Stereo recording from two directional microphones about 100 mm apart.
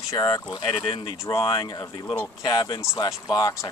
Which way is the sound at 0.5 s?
45° left (ahead or behind).